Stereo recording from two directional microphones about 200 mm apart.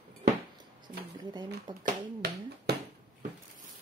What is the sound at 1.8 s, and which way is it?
Speech, 45° right (ahead or behind).